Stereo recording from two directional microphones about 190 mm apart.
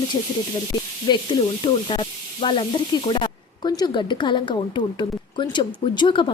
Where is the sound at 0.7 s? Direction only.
20° left (ahead or behind).